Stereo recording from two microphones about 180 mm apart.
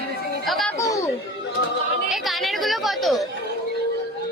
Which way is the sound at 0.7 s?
15° left (ahead or behind).